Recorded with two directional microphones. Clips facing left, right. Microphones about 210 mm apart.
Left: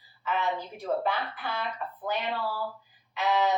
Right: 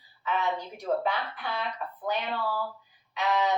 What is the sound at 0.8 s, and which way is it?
Speech, centre (ahead or behind).